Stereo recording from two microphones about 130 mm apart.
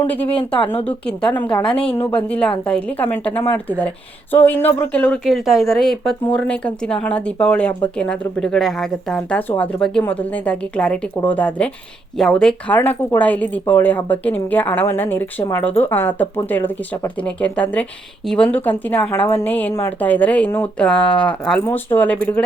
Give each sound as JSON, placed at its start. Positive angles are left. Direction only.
{"t": 0.0, "sound": "speech", "side_deg": 10}
{"t": 0.3, "sound": "speech", "side_deg": 45}
{"t": 0.9, "sound": "speech", "side_deg": 10}
{"t": 1.6, "sound": "speech", "side_deg": 45}
{"t": 1.9, "sound": "speech", "side_deg": 15}